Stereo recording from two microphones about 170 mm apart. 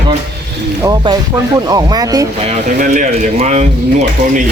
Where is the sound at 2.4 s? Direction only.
50° right (ahead or behind).